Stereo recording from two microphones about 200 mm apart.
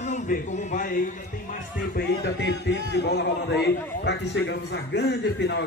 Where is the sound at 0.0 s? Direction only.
35° left (ahead or behind).